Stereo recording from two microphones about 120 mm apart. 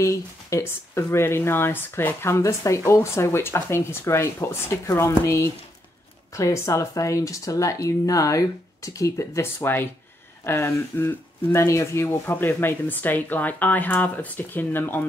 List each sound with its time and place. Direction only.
0.0 s speech: 25° left (ahead or behind)